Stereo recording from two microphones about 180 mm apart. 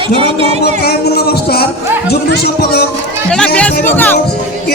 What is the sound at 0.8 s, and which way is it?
Speech, 60° left (ahead or behind).